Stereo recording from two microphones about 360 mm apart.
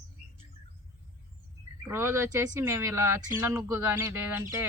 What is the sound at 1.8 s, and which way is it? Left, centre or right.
Speech, centre.